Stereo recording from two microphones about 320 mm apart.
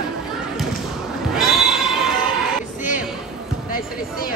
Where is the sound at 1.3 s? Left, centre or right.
Centre.